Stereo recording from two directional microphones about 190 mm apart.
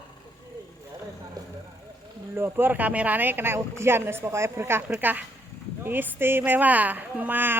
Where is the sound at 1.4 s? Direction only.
20° right (ahead or behind).